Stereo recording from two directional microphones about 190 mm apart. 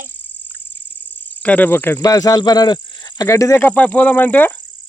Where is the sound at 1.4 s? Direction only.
10° left (ahead or behind).